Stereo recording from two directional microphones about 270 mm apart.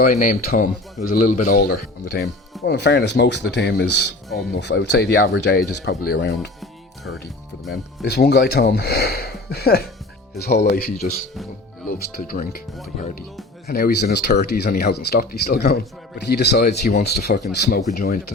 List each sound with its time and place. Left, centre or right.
0.0 s speech: left
7.7 s speech: left